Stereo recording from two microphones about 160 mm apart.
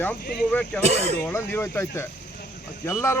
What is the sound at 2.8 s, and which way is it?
Speech, 15° left (ahead or behind).